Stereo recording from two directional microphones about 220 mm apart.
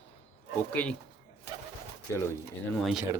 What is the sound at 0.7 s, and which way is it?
Speech, 5° left (ahead or behind).